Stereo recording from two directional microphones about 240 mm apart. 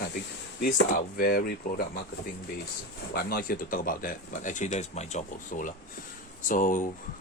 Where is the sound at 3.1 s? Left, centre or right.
Left.